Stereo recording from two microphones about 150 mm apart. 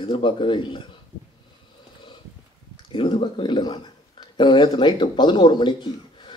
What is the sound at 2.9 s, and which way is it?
Speech, 35° left (ahead or behind).